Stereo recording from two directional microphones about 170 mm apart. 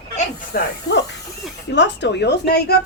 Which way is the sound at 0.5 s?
85° left.